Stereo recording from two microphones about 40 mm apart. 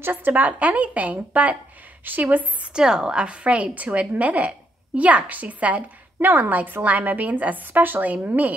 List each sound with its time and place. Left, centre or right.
0.0 s a woman's voice: right
2.7 s a woman's voice: centre
3.7 s a woman's voice: right
6.1 s a woman's voice: right